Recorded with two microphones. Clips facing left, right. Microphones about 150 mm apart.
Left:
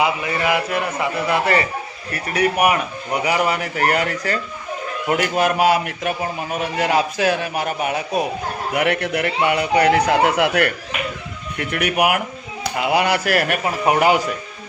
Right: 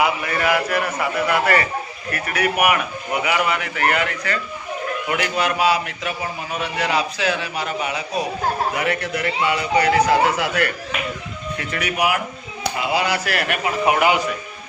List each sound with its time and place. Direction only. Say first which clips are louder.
0.0 s a man's voice: even; 20° left (ahead or behind); by 8.2 s 50° left (ahead or behind)
8.7 s a man's voice: left 3 dB; 65° left (ahead or behind); by 14.2 s 40° left (ahead or behind)